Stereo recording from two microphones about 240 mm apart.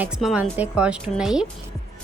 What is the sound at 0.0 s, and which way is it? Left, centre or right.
A woman's voice, centre.